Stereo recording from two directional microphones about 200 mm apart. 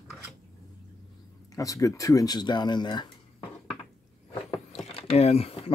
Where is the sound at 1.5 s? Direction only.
15° left (ahead or behind).